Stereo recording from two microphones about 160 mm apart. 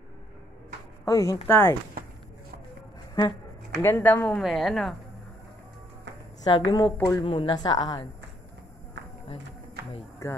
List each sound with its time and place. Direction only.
1.0 s speech: 20° left (ahead or behind)
3.8 s speech: 10° left (ahead or behind)
4.4 s a woman's voice: centre (ahead or behind)
6.4 s speech: 25° left (ahead or behind)
7.2 s speech: 30° left (ahead or behind)
10.2 s speech: 20° left (ahead or behind)